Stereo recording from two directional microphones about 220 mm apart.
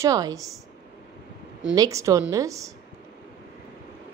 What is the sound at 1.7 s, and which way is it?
Speech, 15° right (ahead or behind).